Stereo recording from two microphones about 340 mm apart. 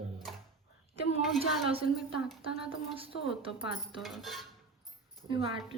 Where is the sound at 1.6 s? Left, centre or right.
Centre.